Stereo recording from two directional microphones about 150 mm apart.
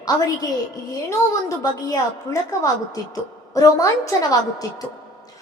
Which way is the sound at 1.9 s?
20° left (ahead or behind).